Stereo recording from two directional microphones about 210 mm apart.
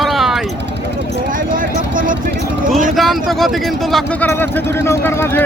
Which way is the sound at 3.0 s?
Centre (ahead or behind).